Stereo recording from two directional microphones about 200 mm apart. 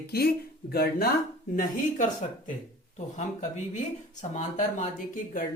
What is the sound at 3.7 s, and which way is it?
Speech, 35° left (ahead or behind).